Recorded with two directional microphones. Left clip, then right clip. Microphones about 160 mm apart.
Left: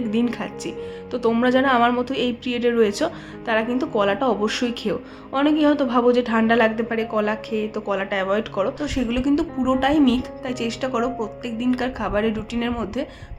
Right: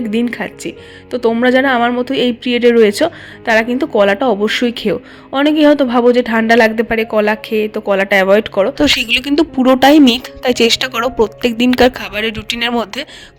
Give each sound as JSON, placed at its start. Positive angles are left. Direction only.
{"t": 0.1, "sound": "a woman's voice", "side_deg": -25}
{"t": 8.8, "sound": "a woman's voice", "side_deg": -65}